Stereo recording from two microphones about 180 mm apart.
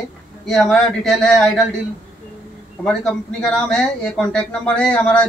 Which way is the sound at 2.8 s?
5° left (ahead or behind).